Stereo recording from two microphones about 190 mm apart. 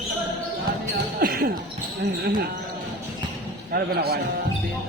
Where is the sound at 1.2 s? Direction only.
50° right (ahead or behind).